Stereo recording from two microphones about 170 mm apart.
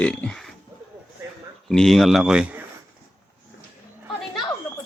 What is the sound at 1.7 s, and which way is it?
Speech, centre (ahead or behind).